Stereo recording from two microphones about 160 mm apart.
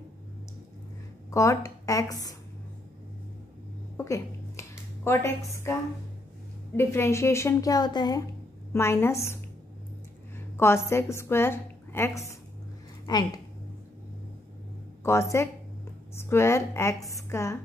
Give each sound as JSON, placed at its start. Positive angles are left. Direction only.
{"t": 1.3, "sound": "speech", "side_deg": 20}
{"t": 3.9, "sound": "a sound", "side_deg": 20}
{"t": 6.8, "sound": "a woman's voice", "side_deg": 15}
{"t": 8.7, "sound": "a woman's voice", "side_deg": 15}
{"t": 10.6, "sound": "a woman's voice", "side_deg": 15}
{"t": 15.0, "sound": "a woman's voice", "side_deg": 15}